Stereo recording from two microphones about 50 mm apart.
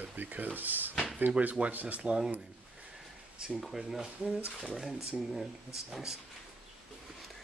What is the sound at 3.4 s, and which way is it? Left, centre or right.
Speech, centre.